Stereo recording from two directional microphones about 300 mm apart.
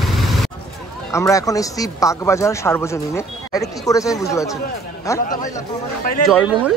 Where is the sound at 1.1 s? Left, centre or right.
Centre.